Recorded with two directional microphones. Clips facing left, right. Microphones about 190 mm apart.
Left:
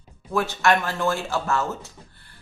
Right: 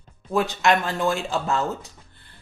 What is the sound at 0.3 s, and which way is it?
Speech, 20° right (ahead or behind).